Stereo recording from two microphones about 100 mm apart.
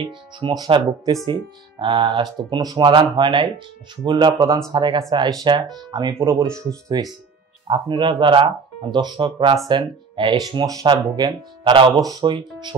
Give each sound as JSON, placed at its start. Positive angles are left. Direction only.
{"t": 0.0, "sound": "speech", "side_deg": -60}
{"t": 2.6, "sound": "speech", "side_deg": -35}
{"t": 2.9, "sound": "speech", "side_deg": -50}
{"t": 6.2, "sound": "speech", "side_deg": -30}
{"t": 7.6, "sound": "speech", "side_deg": -55}
{"t": 12.3, "sound": "speech", "side_deg": -50}